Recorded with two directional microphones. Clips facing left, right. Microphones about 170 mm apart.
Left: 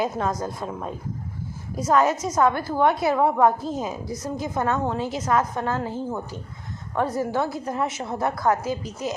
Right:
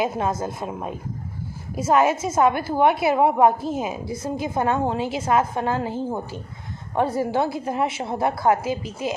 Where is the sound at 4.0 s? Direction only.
25° right (ahead or behind).